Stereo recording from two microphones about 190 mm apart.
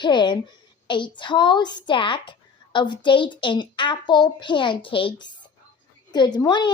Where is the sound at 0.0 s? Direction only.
25° left (ahead or behind).